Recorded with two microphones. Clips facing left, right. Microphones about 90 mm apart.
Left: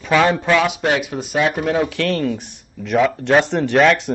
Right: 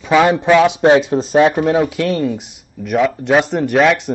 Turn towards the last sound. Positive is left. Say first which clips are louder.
# right 1 dB
turn(degrees=0)  # may be behind; listen again after turning